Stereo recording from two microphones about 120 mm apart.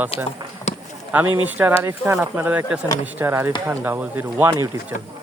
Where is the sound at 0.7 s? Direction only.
70° left (ahead or behind).